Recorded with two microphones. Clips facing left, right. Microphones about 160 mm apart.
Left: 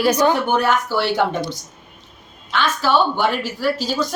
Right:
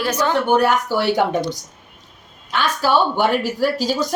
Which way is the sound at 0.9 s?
45° right (ahead or behind).